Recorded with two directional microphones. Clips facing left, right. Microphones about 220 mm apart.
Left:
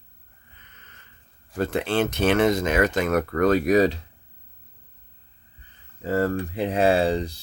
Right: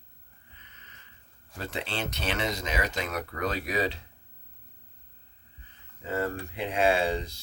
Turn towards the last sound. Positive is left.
turn(degrees=35)  # may be behind; listen again after turning